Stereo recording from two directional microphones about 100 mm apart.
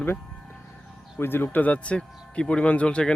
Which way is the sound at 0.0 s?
20° left (ahead or behind).